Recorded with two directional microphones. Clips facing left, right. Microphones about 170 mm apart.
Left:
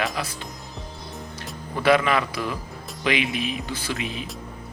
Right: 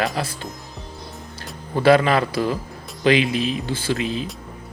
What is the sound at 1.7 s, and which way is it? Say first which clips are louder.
A man's voice: right 4 dB; 30° right (ahead or behind).